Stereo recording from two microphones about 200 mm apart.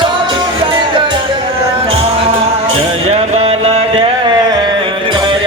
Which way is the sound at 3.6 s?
25° right (ahead or behind).